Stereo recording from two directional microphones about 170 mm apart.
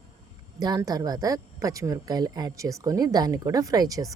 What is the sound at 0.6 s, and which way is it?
A woman's voice, 20° right (ahead or behind).